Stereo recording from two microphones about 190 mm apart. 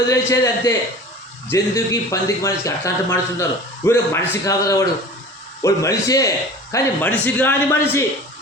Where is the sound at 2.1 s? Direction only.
15° left (ahead or behind).